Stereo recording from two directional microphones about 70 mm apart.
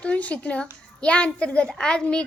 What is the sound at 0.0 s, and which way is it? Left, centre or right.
A child's voice, centre.